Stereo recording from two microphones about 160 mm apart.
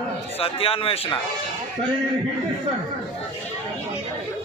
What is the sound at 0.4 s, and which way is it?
Speech, 35° left (ahead or behind).